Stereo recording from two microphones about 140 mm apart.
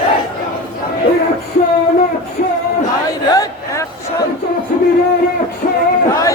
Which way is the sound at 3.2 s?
25° left (ahead or behind).